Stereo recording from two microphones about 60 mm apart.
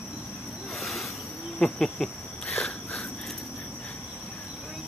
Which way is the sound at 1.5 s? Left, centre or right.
Centre.